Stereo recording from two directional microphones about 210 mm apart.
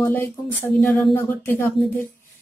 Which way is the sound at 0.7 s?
10° left (ahead or behind).